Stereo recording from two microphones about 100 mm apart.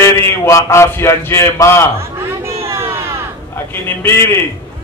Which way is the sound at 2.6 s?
25° right (ahead or behind).